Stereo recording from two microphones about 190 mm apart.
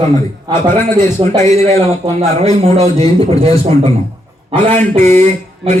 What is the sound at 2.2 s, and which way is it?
A man's voice, 35° right (ahead or behind).